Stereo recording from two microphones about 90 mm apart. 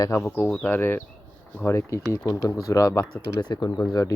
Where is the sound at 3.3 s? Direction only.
50° left (ahead or behind).